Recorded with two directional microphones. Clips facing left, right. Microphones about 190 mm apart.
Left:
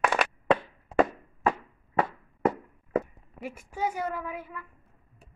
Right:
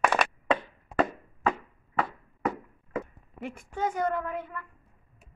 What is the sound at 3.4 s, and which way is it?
A woman's voice, 10° left (ahead or behind).